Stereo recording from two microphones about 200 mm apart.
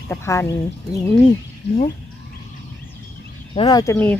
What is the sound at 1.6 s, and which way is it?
Speech, 60° left (ahead or behind).